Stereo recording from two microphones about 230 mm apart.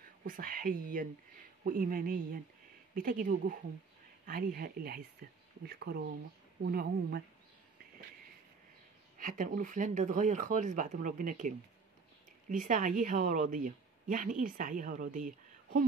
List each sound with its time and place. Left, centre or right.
0.2 s a woman's voice: right
9.2 s a woman's voice: right